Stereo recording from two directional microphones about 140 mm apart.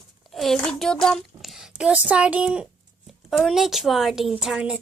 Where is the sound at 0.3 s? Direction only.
5° left (ahead or behind).